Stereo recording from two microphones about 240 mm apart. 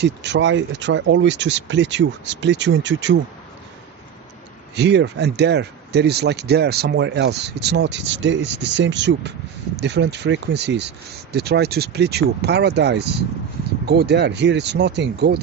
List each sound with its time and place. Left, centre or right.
0.0 s speech: right
4.7 s speech: right